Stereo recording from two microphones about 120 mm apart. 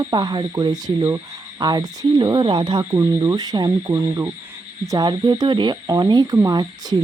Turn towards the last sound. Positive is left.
turn(degrees=-35)  # may be behind; listen again after turning